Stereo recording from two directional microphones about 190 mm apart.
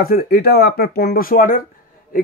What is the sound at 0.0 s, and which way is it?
Speech, 55° left (ahead or behind).